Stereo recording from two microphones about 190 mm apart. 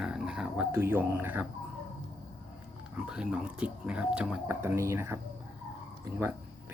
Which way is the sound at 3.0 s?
5° right (ahead or behind).